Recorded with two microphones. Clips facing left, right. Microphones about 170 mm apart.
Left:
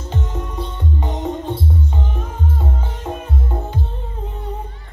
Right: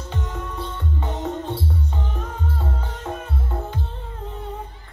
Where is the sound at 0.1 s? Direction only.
20° left (ahead or behind).